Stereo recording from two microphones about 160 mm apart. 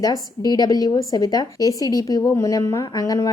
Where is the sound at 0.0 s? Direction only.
25° left (ahead or behind).